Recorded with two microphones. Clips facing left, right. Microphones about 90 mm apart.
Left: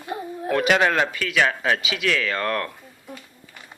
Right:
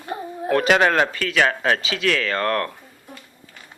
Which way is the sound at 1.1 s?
10° left (ahead or behind).